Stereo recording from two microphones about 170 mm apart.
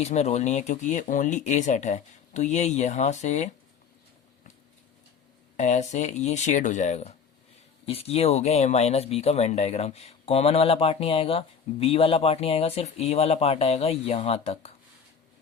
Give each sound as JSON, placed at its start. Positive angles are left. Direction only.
{"t": 0.0, "sound": "speech", "side_deg": 40}
{"t": 5.5, "sound": "speech", "side_deg": 45}